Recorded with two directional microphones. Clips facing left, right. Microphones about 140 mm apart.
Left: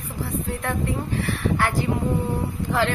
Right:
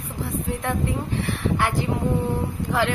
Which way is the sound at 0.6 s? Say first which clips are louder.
Right 1 dB; 20° right (ahead or behind).